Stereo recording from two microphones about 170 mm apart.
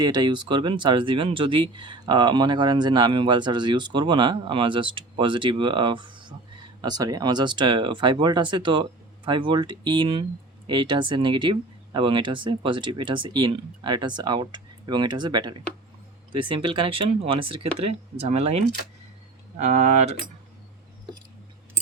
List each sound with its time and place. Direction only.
0.0 s speech: 25° right (ahead or behind); by 20.1 s 40° right (ahead or behind)